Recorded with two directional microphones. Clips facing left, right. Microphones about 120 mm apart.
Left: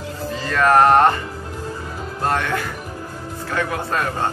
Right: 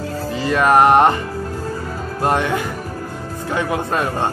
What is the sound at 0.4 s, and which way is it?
Music, 15° right (ahead or behind).